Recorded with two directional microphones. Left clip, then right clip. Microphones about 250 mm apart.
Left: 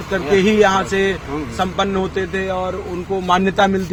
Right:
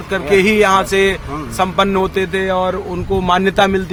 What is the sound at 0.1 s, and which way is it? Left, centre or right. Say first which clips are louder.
Speech: right 3 dB; right.